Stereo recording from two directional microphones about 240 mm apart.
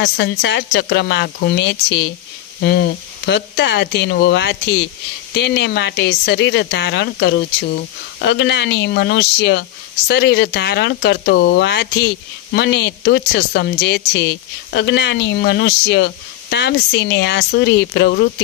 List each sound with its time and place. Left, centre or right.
0.0 s a woman's voice: left